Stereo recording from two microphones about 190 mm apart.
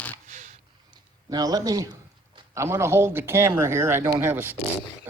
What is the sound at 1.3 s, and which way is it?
A man's voice, 20° right (ahead or behind).